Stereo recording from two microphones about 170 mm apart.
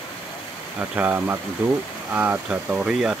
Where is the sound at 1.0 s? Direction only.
10° right (ahead or behind).